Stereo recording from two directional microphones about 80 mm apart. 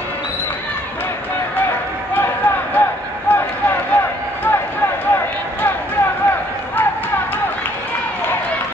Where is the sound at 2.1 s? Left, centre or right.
Left.